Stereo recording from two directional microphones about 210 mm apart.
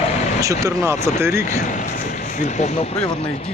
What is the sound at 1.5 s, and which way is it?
A man's voice, 35° left (ahead or behind).